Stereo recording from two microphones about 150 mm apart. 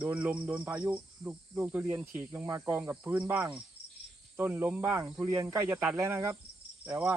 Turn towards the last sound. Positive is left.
turn(degrees=-15)  # may be behind; listen again after turning